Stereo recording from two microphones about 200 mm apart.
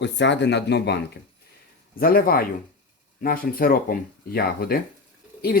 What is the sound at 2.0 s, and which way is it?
Speech, 45° left (ahead or behind).